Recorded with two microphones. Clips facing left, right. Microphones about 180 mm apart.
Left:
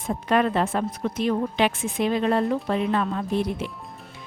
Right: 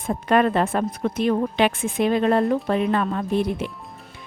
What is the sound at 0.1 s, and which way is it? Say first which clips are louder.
A woman's voice: right 3 dB; 55° right (ahead or behind).